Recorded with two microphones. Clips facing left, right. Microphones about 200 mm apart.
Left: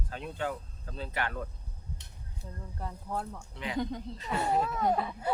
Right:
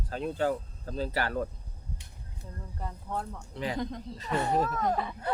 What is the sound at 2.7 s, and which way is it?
Speech, centre (ahead or behind).